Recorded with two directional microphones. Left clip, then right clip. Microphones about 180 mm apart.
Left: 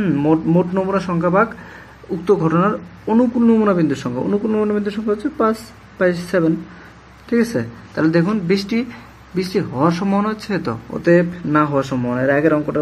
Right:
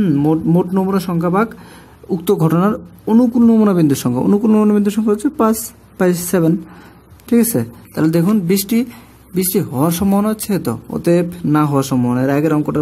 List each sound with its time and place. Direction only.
0.0 s speech: 75° right (ahead or behind)
11.1 s speech: 90° right